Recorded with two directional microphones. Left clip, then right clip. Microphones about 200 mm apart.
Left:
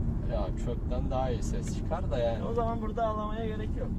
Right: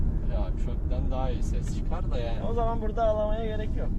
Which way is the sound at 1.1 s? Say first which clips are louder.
Left 2 dB; 50° left (ahead or behind).